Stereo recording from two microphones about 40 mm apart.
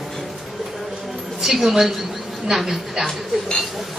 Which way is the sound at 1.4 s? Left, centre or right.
Centre.